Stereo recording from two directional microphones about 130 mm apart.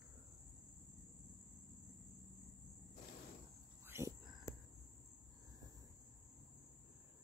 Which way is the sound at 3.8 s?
20° right (ahead or behind).